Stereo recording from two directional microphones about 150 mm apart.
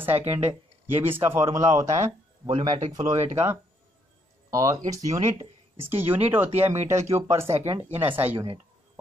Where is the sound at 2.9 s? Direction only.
25° right (ahead or behind).